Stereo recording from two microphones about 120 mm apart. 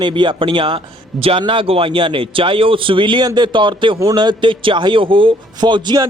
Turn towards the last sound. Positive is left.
turn(degrees=-35)  # may be behind; listen again after turning